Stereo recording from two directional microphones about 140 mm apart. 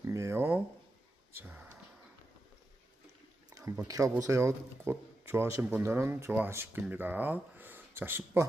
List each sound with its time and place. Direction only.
0.0 s a sound: 20° right (ahead or behind)
1.4 s speech: 15° right (ahead or behind)
3.7 s speech: 20° right (ahead or behind)